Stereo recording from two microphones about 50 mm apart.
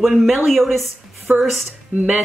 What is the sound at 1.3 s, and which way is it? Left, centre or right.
Speech, right.